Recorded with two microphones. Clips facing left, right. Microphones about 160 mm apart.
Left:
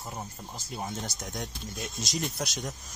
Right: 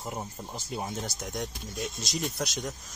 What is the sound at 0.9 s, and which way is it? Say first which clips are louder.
Speech: right 2 dB; centre (ahead or behind).